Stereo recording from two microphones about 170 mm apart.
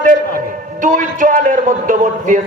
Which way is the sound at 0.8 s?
50° right (ahead or behind).